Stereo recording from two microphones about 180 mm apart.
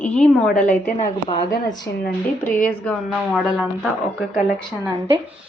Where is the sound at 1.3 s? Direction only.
25° left (ahead or behind).